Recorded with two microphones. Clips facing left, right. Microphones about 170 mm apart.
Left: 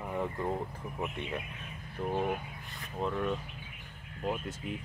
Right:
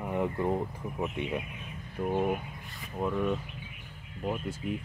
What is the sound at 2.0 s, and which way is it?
Speech, 10° right (ahead or behind).